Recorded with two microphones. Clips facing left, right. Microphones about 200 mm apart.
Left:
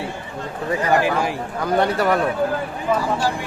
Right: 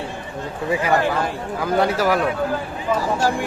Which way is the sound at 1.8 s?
Centre (ahead or behind).